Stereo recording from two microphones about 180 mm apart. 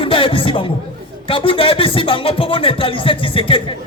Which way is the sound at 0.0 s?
30° left (ahead or behind).